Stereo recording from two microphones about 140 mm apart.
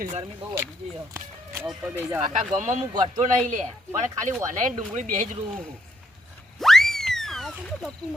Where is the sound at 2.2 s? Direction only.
60° right (ahead or behind).